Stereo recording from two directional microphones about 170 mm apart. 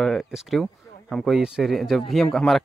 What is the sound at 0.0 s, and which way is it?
Speech, centre (ahead or behind).